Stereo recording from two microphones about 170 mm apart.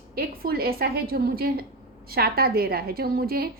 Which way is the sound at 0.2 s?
60° right (ahead or behind).